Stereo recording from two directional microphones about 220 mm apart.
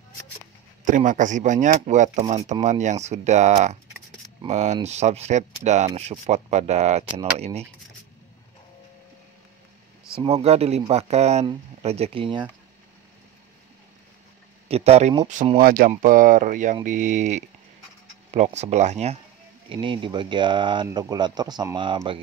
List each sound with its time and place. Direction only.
0.8 s speech: 35° right (ahead or behind)
10.1 s speech: 25° right (ahead or behind)
14.7 s speech: 30° right (ahead or behind)
18.6 s speech: 30° right (ahead or behind)